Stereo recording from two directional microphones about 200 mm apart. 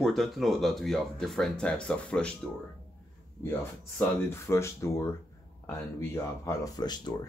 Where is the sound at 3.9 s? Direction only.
15° left (ahead or behind).